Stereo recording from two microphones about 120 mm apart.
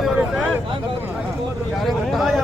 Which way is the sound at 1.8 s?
Centre (ahead or behind).